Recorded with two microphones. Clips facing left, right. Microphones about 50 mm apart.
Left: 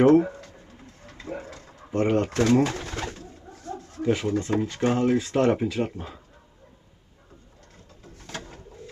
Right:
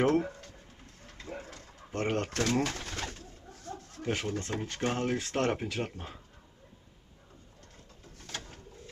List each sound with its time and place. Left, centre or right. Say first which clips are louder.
0.0 s pigeon: left 10 dB; left
1.5 s speech: left 10 dB; left
3.2 s a sound: left 6 dB; left
4.1 s speech: left 9 dB; left
8.2 s bird: left 5 dB; left